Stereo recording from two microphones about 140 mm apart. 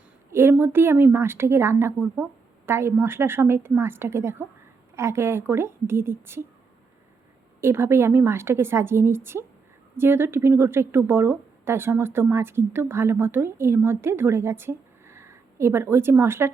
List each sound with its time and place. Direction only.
0.3 s a woman's voice: 15° right (ahead or behind)
7.6 s a woman's voice: 15° right (ahead or behind)